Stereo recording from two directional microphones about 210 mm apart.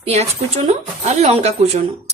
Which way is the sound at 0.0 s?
30° right (ahead or behind).